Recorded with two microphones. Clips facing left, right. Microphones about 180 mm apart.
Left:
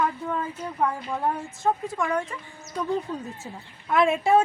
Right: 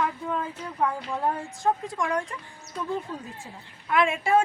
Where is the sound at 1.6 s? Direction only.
5° left (ahead or behind).